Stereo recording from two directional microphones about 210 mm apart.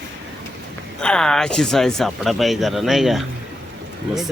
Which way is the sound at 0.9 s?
5° left (ahead or behind).